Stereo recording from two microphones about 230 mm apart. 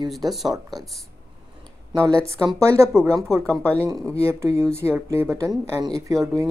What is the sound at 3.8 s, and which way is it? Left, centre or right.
Speech, centre.